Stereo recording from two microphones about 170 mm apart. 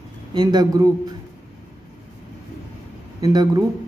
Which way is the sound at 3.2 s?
20° right (ahead or behind).